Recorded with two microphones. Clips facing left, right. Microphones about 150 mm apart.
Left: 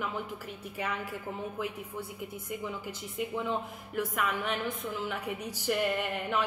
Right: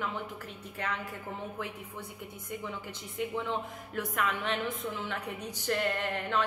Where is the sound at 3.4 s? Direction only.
5° left (ahead or behind).